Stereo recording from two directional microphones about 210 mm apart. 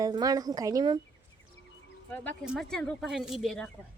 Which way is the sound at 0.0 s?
20° right (ahead or behind).